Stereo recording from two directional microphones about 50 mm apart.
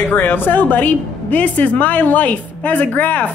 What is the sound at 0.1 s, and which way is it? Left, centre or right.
A woman's voice, left.